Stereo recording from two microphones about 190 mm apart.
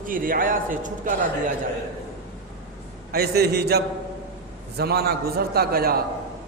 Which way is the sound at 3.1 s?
55° right (ahead or behind).